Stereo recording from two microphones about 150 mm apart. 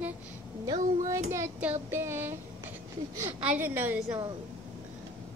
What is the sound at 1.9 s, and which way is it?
Child singing, 15° right (ahead or behind).